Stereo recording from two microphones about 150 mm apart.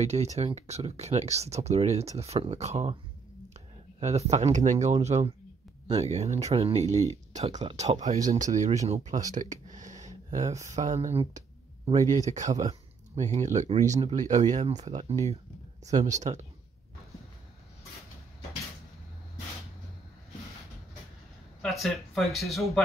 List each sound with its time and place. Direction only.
0.0 s speech: 50° right (ahead or behind)
4.0 s speech: 50° right (ahead or behind)
6.8 s speech: 20° left (ahead or behind)
7.3 s speech: 50° right (ahead or behind)
9.3 s a sound: 55° right (ahead or behind)
10.7 s speech: 50° right (ahead or behind)
21.5 s speech: centre (ahead or behind)